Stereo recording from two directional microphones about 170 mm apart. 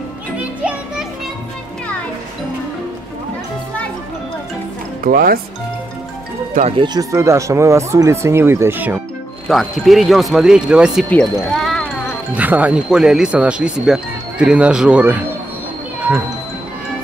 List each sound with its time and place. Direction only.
0.4 s music: 10° right (ahead or behind)
5.0 s speech: 60° right (ahead or behind)
6.8 s speech: 20° right (ahead or behind); by 11.9 s centre (ahead or behind)
12.4 s speech: 10° right (ahead or behind)